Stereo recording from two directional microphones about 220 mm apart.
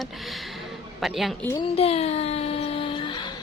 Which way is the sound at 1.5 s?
25° left (ahead or behind).